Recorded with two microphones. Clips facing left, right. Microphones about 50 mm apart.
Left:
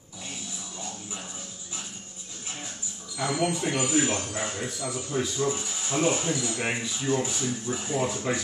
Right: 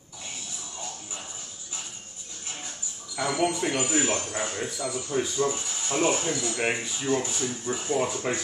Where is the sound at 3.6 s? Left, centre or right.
Centre.